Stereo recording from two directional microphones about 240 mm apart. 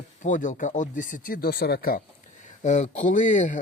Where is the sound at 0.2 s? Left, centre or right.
Left.